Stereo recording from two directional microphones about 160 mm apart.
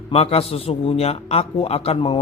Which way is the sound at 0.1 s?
40° left (ahead or behind).